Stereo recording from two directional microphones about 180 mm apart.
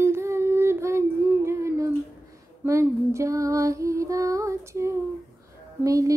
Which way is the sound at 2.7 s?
15° right (ahead or behind).